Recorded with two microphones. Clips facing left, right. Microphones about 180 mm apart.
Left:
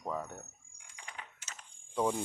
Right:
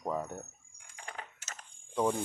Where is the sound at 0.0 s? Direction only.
15° right (ahead or behind).